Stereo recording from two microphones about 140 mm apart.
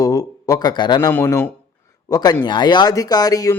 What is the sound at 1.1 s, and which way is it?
Speech, 15° left (ahead or behind).